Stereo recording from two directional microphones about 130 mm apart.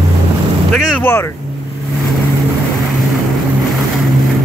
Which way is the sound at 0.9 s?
15° left (ahead or behind).